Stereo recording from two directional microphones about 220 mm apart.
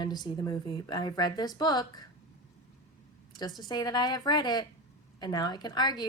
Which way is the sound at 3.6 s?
20° left (ahead or behind).